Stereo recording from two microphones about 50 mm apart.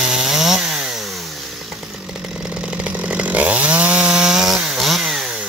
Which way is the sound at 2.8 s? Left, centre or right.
Right.